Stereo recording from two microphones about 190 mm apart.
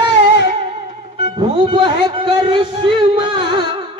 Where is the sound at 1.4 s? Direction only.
25° right (ahead or behind).